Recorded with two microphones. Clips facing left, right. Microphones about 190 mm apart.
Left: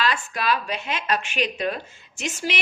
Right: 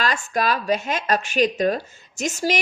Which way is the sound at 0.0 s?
45° right (ahead or behind).